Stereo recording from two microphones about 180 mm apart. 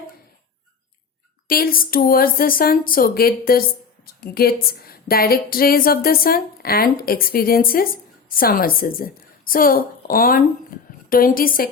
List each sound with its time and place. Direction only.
1.5 s a woman's voice: 55° left (ahead or behind)